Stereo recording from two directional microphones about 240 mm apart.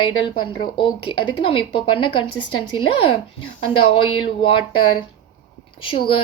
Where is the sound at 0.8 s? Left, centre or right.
Left.